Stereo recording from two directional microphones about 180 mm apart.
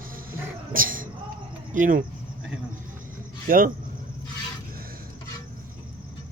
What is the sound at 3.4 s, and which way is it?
Speech, 50° right (ahead or behind).